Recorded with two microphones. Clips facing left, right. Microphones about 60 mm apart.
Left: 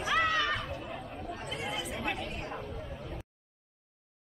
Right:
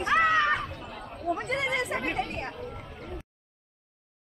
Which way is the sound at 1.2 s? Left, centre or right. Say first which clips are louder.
Right 12 dB; right.